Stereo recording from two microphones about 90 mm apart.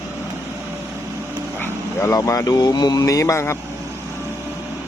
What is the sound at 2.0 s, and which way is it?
Speech, 35° left (ahead or behind).